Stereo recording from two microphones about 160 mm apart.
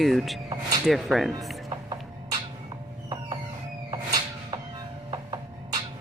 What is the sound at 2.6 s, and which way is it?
Music, 25° right (ahead or behind).